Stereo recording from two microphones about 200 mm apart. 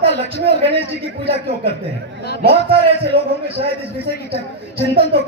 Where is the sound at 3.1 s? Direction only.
25° right (ahead or behind).